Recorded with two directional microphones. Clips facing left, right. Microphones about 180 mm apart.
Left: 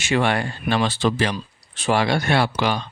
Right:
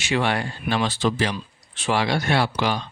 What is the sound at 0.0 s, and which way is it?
Speech, 50° left (ahead or behind).